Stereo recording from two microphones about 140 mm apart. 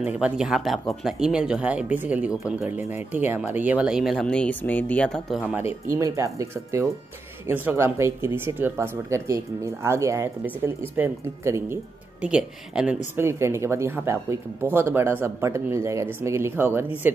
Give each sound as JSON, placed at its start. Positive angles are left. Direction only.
{"t": 0.0, "sound": "speech", "side_deg": -5}
{"t": 5.9, "sound": "speech", "side_deg": -20}
{"t": 12.2, "sound": "speech", "side_deg": -5}
{"t": 13.2, "sound": "speech", "side_deg": -20}